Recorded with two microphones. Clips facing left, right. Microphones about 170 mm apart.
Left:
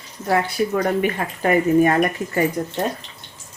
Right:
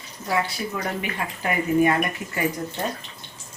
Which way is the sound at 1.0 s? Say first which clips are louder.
Left 7 dB; 45° left (ahead or behind).